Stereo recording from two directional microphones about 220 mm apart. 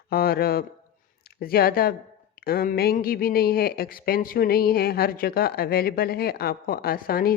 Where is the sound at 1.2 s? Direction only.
45° left (ahead or behind).